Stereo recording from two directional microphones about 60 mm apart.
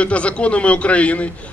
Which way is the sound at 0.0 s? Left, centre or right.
Left.